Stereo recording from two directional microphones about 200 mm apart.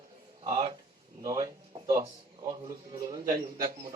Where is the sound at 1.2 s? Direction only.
20° right (ahead or behind).